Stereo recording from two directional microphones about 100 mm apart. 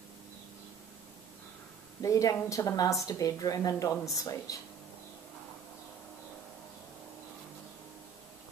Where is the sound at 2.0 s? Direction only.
35° left (ahead or behind).